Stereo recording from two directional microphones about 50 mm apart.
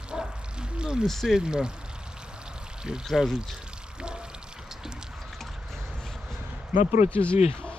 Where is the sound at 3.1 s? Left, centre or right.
Centre.